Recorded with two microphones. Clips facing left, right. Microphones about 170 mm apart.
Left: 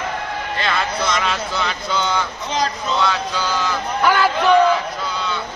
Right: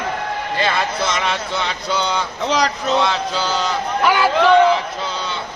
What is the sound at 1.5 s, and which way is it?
Speech, 15° right (ahead or behind).